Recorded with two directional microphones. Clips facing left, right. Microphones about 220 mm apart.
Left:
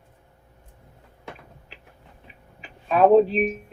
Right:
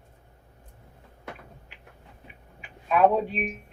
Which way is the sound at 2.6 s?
35° left (ahead or behind).